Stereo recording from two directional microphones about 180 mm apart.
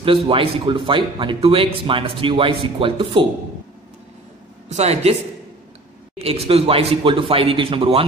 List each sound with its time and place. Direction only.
0.0 s a man's voice: 30° right (ahead or behind)
4.6 s speech: 35° right (ahead or behind)
6.1 s speech: 35° right (ahead or behind)